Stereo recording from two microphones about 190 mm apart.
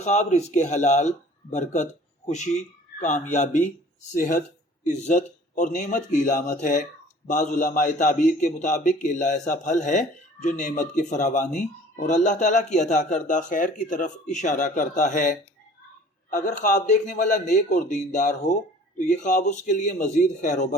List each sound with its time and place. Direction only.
0.0 s a man's voice: 40° left (ahead or behind)